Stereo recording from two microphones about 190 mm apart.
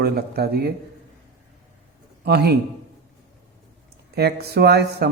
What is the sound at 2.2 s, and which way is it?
Speech, 55° right (ahead or behind).